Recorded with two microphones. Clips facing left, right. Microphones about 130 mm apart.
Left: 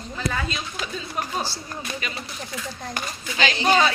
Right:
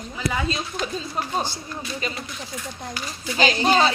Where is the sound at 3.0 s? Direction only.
50° left (ahead or behind).